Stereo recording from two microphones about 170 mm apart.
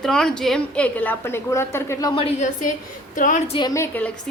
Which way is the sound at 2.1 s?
35° left (ahead or behind).